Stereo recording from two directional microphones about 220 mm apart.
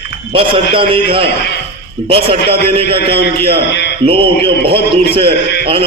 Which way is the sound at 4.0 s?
25° right (ahead or behind).